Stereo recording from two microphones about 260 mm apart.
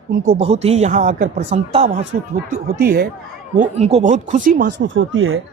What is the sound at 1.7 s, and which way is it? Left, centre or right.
Speech, right.